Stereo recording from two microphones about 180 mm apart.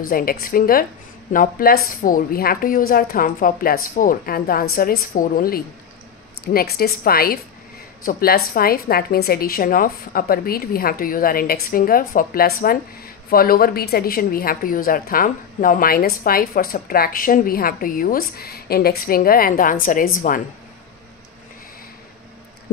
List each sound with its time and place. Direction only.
0.1 s a woman's voice: 55° left (ahead or behind)